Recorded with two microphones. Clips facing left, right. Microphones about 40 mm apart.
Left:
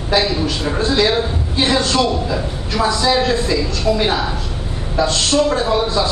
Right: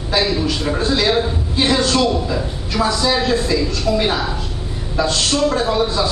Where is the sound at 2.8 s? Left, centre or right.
Left.